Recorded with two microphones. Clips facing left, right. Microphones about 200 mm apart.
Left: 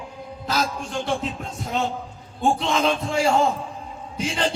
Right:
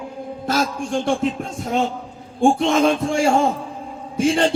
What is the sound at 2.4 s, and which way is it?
Music, 50° right (ahead or behind).